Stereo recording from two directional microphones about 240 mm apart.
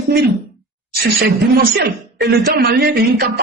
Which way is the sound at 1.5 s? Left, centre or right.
Right.